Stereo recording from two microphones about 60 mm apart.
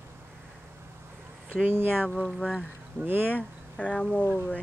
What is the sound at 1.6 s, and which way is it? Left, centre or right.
Speech, right.